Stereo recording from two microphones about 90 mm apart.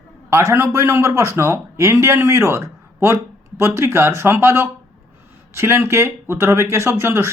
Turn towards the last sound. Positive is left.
turn(degrees=-30)  # may be behind; listen again after turning